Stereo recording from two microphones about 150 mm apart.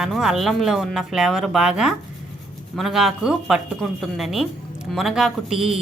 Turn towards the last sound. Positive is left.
turn(degrees=-5)  # may be behind; listen again after turning